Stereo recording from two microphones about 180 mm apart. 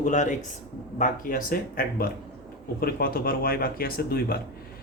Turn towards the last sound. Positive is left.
turn(degrees=55)  # may be behind; listen again after turning